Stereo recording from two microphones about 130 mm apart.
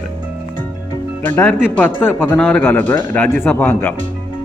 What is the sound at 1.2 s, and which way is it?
Speech, 15° left (ahead or behind).